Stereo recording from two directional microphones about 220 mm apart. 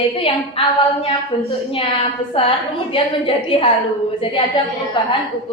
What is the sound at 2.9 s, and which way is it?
A woman's voice, 25° left (ahead or behind).